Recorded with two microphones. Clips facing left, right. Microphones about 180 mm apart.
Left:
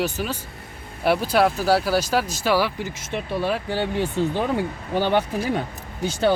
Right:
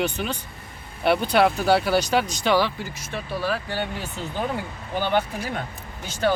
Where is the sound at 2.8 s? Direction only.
20° left (ahead or behind).